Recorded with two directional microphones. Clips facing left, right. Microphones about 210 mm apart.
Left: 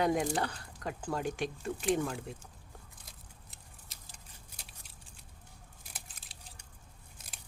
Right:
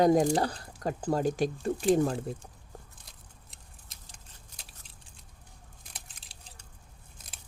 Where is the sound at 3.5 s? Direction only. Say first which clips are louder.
Even; 5° left (ahead or behind).